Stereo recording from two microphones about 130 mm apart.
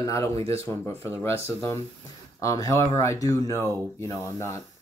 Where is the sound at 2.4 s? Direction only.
25° left (ahead or behind).